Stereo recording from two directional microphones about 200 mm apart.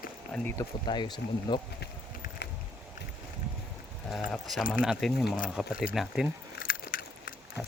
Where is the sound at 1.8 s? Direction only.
55° left (ahead or behind).